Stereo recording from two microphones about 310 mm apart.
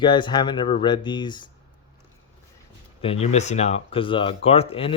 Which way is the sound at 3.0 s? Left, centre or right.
Centre.